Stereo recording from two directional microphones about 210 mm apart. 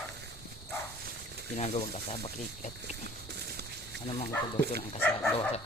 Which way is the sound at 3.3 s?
50° right (ahead or behind).